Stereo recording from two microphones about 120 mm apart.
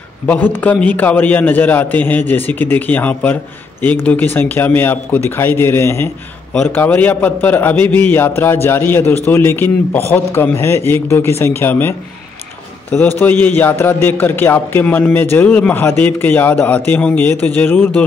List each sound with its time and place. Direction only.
0.3 s a man's voice: 15° left (ahead or behind)
13.2 s a man's voice: 15° left (ahead or behind)